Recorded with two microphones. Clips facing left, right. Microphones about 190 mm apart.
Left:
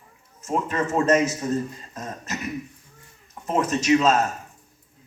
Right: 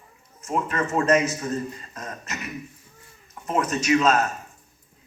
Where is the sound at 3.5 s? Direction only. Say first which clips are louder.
Left 2 dB; 20° left (ahead or behind).